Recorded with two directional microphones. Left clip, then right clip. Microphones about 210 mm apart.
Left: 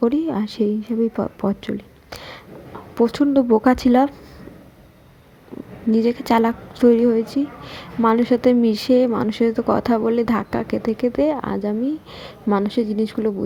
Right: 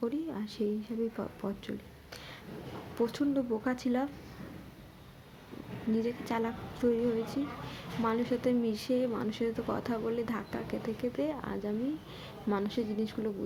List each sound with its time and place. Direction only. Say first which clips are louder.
0.0 s a woman's voice: left 16 dB; 45° left (ahead or behind)
5.9 s a woman's voice: left 16 dB; 45° left (ahead or behind)